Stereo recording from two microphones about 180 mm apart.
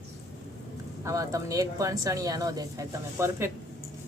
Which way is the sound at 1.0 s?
15° right (ahead or behind).